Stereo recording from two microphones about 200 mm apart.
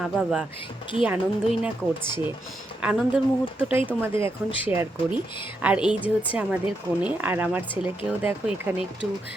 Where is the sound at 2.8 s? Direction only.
5° right (ahead or behind).